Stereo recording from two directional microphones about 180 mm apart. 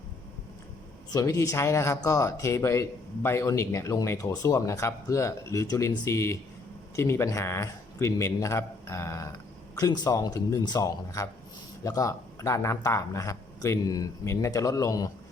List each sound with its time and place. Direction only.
1.1 s speech: 20° left (ahead or behind)